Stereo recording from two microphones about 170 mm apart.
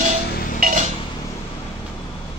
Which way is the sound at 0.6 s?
50° right (ahead or behind).